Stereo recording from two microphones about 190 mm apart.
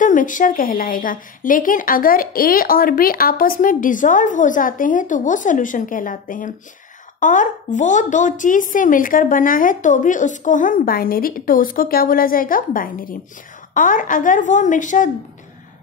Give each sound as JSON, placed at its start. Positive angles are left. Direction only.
{"t": 0.0, "sound": "a woman's voice", "side_deg": 45}